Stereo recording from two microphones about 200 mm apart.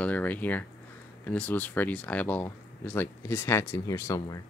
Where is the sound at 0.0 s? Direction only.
10° left (ahead or behind).